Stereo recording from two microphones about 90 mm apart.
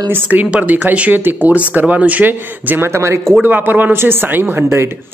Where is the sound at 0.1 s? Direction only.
15° right (ahead or behind).